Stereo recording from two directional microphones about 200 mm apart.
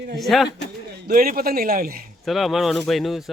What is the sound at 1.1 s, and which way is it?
Speech, 45° right (ahead or behind).